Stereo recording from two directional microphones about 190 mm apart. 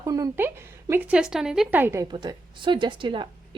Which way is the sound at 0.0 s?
15° right (ahead or behind).